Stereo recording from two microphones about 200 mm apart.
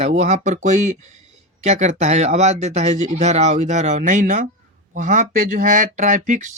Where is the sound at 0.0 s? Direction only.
35° right (ahead or behind).